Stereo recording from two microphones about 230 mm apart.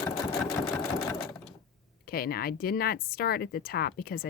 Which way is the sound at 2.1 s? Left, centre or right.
Left.